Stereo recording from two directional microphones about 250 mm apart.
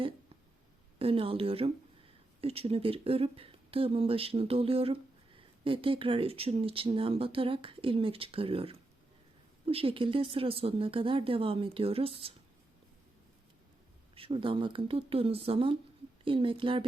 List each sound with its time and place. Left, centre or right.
0.9 s speech: right
14.2 s speech: right